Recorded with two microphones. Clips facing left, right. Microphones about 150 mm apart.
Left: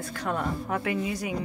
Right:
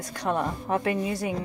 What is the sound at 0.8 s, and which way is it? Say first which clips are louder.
Speech: right 2 dB; 35° right (ahead or behind).